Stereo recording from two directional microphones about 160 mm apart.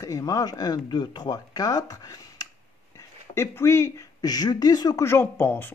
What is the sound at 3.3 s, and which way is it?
Speech, 15° left (ahead or behind).